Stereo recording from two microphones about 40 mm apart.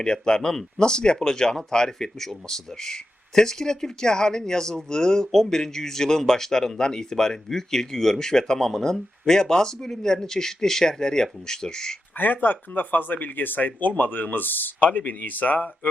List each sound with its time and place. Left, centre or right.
0.0 s speech: left
12.1 s speech: left